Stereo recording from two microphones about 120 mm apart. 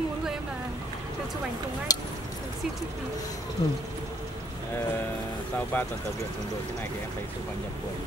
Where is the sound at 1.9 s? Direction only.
35° left (ahead or behind).